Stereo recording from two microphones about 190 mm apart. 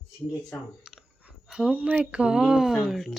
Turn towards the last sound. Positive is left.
turn(degrees=0)  # may be behind; listen again after turning